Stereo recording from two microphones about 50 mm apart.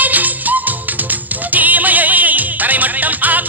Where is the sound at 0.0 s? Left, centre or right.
Right.